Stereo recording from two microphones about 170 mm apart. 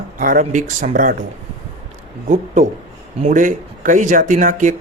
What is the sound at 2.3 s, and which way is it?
Speech, 45° right (ahead or behind).